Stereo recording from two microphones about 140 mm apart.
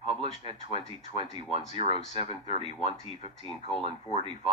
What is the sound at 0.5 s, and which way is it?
Speech, 55° left (ahead or behind).